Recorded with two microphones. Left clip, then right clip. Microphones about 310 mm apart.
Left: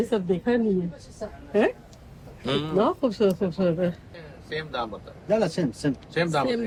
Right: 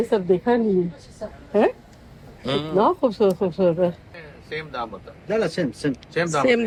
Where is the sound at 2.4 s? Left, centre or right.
Centre.